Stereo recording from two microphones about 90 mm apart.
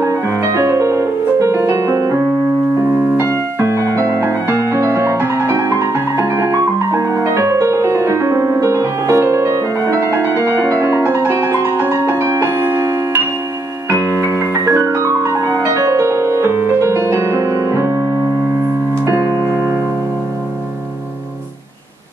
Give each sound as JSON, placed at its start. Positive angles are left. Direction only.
{"t": 0.0, "sound": "music", "side_deg": -35}
{"t": 19.0, "sound": "music", "side_deg": -30}